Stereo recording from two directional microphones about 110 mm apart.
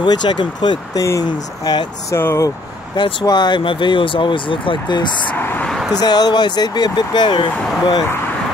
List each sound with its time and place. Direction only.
0.0 s speech: 40° left (ahead or behind)
2.1 s speech: 20° left (ahead or behind)
3.0 s speech: 40° left (ahead or behind)
5.3 s speech: 15° left (ahead or behind)
5.7 s speech: 5° left (ahead or behind)
5.9 s speech: 40° left (ahead or behind)